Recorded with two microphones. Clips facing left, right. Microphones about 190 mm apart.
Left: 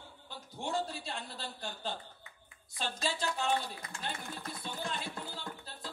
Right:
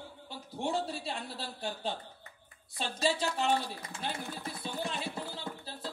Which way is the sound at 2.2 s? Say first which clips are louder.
Right 2 dB; 40° right (ahead or behind).